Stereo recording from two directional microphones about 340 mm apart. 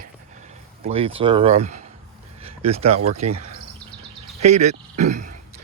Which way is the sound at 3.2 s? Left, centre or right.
Centre.